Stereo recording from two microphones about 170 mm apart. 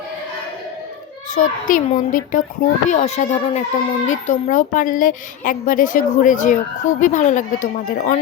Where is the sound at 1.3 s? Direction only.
50° left (ahead or behind).